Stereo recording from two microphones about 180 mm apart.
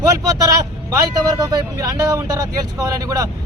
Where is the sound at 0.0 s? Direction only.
20° right (ahead or behind).